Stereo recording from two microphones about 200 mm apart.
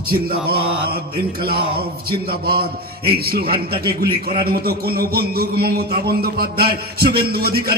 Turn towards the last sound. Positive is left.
turn(degrees=-50)  # may be behind; listen again after turning